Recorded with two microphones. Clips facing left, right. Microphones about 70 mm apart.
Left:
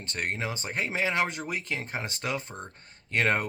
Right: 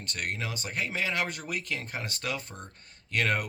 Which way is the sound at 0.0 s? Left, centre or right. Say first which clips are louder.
Left 3 dB; left.